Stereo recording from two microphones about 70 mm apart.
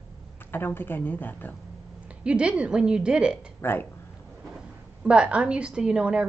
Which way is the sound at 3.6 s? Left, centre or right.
Left.